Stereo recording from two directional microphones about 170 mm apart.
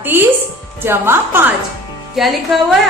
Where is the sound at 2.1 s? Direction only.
Centre (ahead or behind).